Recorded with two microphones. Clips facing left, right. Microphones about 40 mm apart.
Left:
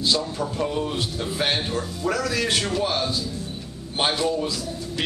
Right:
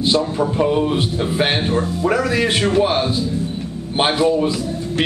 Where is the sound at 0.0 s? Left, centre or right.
Right.